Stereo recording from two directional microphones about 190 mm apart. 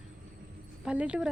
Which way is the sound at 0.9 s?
5° right (ahead or behind).